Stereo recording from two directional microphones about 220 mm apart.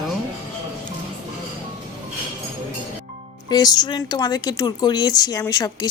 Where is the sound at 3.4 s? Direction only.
15° left (ahead or behind).